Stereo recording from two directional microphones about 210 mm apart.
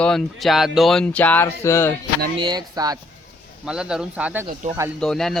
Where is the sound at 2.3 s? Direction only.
20° right (ahead or behind).